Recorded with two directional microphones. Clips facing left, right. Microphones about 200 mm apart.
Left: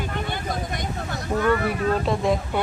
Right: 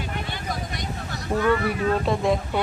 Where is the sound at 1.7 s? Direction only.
Centre (ahead or behind).